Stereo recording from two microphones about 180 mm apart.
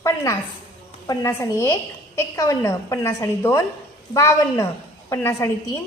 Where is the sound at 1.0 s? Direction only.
20° left (ahead or behind).